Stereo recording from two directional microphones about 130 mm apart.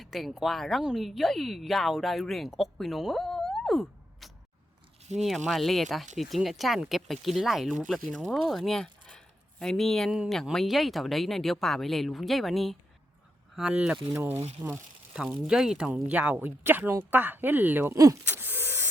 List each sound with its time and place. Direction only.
0.0 s speech: centre (ahead or behind)
5.1 s speech: 60° right (ahead or behind)
5.5 s speech: centre (ahead or behind)
14.2 s speech: 20° right (ahead or behind)
18.3 s hiss: 15° right (ahead or behind)